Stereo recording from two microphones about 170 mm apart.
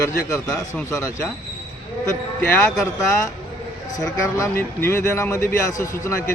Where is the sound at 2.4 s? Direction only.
10° left (ahead or behind).